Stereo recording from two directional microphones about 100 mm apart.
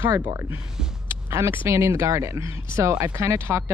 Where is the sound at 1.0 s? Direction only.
25° right (ahead or behind).